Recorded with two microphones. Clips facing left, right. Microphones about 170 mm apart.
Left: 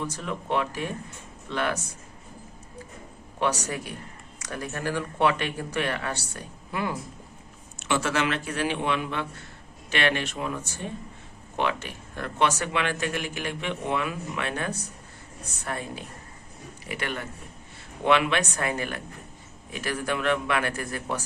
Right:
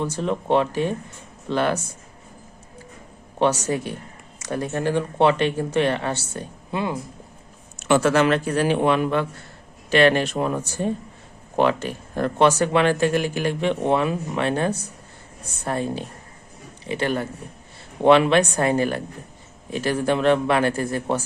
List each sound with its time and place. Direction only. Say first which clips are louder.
0.0 s speech: right 8 dB; 30° right (ahead or behind)
3.3 s speech: right 7 dB; 30° right (ahead or behind)
7.8 s speech: right 8 dB; 45° right (ahead or behind)